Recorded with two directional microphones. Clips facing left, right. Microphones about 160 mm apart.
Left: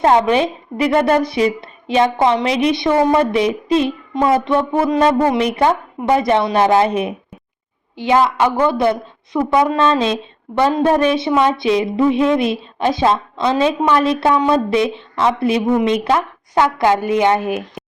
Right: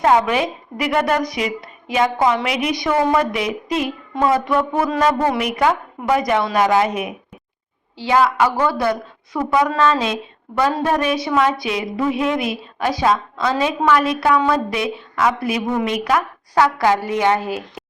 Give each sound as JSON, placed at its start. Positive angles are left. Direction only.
{"t": 0.0, "sound": "a woman's voice", "side_deg": 30}